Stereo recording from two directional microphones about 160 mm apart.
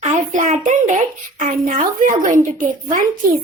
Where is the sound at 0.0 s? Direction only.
50° right (ahead or behind).